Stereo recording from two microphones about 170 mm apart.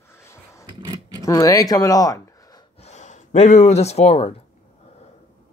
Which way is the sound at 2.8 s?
40° left (ahead or behind).